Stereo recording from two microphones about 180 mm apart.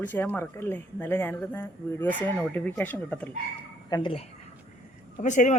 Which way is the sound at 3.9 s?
30° left (ahead or behind).